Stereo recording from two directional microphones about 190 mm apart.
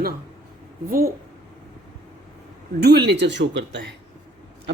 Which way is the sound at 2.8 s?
60° right (ahead or behind).